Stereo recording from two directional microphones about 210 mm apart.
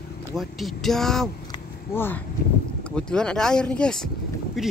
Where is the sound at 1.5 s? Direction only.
10° left (ahead or behind).